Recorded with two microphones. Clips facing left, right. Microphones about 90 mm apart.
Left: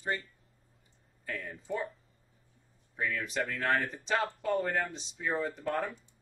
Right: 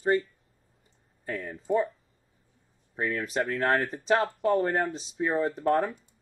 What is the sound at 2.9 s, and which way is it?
Speech, 40° right (ahead or behind).